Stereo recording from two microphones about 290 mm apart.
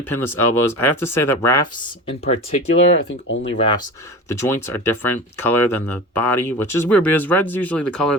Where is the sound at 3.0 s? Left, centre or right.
Left.